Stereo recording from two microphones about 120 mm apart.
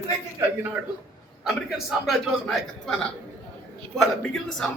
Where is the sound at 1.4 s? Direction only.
5° right (ahead or behind).